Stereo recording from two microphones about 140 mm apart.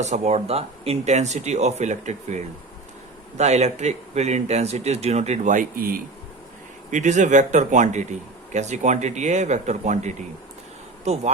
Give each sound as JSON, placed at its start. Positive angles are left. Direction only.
{"t": 0.0, "sound": "speech", "side_deg": -55}
{"t": 6.9, "sound": "speech", "side_deg": -60}